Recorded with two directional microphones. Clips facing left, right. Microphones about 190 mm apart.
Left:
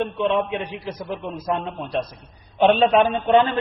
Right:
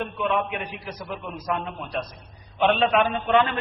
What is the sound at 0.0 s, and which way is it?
A man's voice, 30° left (ahead or behind).